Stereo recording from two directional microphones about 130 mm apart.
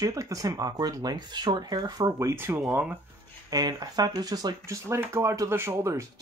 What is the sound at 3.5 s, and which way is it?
Speech, 30° right (ahead or behind).